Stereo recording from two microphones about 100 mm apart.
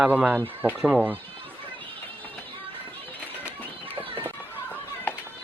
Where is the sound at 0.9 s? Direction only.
10° right (ahead or behind).